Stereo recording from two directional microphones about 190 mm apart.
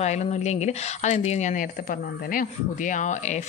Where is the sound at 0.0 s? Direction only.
35° left (ahead or behind).